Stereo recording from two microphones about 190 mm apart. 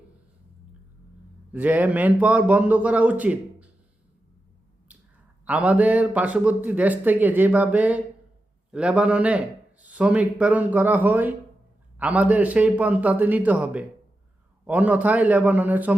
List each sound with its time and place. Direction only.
1.5 s speech: 10° right (ahead or behind)
4.9 s a sound: 5° right (ahead or behind)
5.5 s speech: 10° right (ahead or behind)